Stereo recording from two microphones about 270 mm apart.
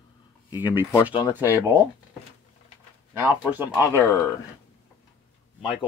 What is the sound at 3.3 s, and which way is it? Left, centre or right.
Speech, centre.